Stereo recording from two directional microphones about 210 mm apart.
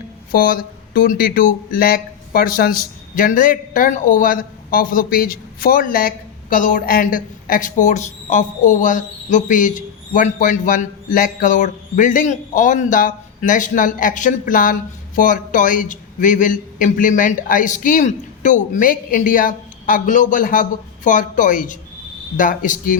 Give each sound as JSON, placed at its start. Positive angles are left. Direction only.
{"t": 0.3, "sound": "speech", "side_deg": 45}